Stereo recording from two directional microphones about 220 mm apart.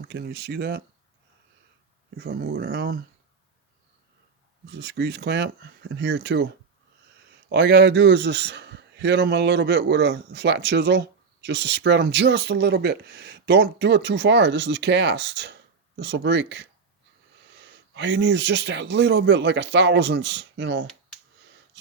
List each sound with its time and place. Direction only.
0.1 s a man's voice: 50° right (ahead or behind)
2.1 s a man's voice: 45° right (ahead or behind)
4.6 s a man's voice: 50° right (ahead or behind)
7.5 s a man's voice: 50° right (ahead or behind)